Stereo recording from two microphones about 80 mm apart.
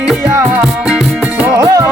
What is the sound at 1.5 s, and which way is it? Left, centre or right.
Music, right.